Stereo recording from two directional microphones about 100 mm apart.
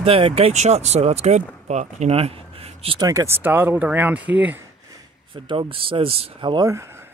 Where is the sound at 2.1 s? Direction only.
80° right.